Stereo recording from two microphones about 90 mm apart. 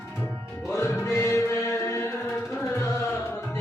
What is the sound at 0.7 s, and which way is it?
Music, 30° left (ahead or behind).